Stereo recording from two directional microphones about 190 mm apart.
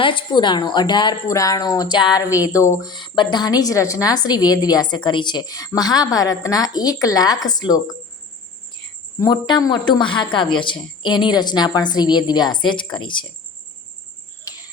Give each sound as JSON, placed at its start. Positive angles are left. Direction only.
{"t": 0.0, "sound": "speech", "side_deg": 25}
{"t": 9.1, "sound": "speech", "side_deg": 20}
{"t": 14.4, "sound": "cricket", "side_deg": 20}